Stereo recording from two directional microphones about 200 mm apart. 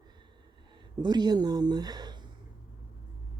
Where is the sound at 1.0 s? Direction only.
20° right (ahead or behind).